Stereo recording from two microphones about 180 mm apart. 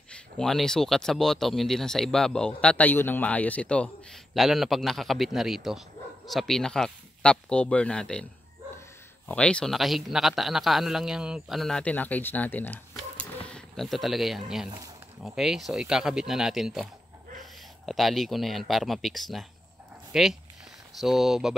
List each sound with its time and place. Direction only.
0.1 s speech: centre (ahead or behind)
9.3 s speech: 5° left (ahead or behind)